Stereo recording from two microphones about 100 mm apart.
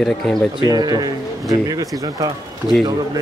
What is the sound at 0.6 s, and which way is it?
Speech, 40° right (ahead or behind).